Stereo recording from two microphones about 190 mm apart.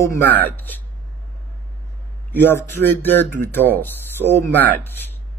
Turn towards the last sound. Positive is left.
turn(degrees=10)  # may be behind; listen again after turning